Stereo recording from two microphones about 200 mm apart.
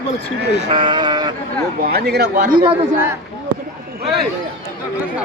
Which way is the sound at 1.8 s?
50° right (ahead or behind).